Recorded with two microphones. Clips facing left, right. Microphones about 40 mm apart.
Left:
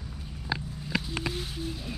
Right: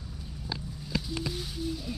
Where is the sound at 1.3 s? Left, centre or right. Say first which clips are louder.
Right 1 dB; left.